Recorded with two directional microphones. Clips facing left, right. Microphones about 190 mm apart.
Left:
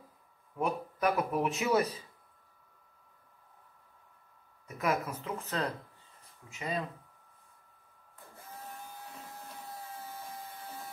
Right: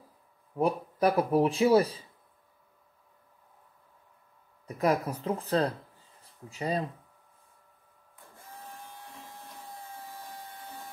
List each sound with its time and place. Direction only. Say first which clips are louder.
0.6 s speech: right 5 dB; 35° right (ahead or behind)
4.6 s speech: right 5 dB; 35° right (ahead or behind)
9.3 s vacuum cleaner: even; centre (ahead or behind)